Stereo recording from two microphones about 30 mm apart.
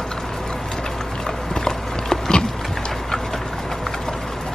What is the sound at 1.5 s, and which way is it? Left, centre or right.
Horse, left.